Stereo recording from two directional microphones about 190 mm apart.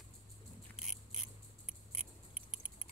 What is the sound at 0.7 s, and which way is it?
Biting, centre (ahead or behind).